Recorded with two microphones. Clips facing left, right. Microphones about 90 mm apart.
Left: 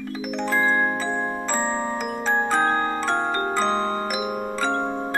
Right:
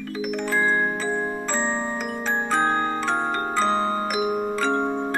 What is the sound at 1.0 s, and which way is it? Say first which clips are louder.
Glockenspiel: even; 30° left (ahead or behind).